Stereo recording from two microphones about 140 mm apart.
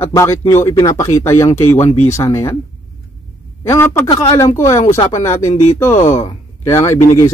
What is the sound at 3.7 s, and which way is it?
Speech, 15° left (ahead or behind).